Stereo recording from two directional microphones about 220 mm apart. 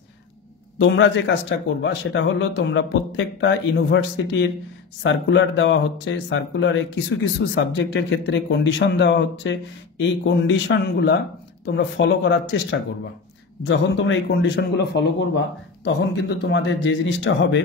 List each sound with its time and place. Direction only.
0.7 s a man's voice: 60° left (ahead or behind)